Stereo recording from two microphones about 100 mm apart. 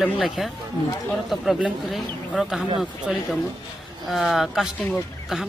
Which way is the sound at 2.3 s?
Centre (ahead or behind).